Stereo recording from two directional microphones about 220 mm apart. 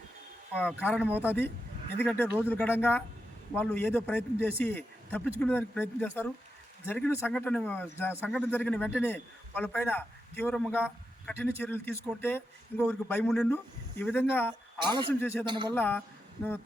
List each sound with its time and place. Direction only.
0.6 s speech: 10° left (ahead or behind)
2.0 s speech: 10° left (ahead or behind)
2.2 s speech: 10° right (ahead or behind)
2.5 s speech: 10° left (ahead or behind)
14.8 s a man's voice: 20° right (ahead or behind)
15.1 s speech: 10° left (ahead or behind)
15.4 s a man's voice: 20° right (ahead or behind)
15.7 s speech: 10° left (ahead or behind)
16.0 s a sound: 10° left (ahead or behind)